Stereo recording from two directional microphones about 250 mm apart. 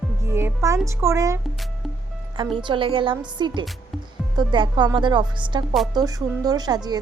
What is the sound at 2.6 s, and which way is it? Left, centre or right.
A woman's voice, centre.